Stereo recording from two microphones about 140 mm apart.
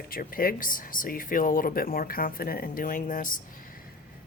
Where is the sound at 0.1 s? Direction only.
90° left; by 3.4 s 75° left (ahead or behind).